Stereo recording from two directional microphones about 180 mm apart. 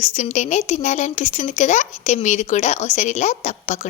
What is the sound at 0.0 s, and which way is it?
A woman's voice, 40° left (ahead or behind).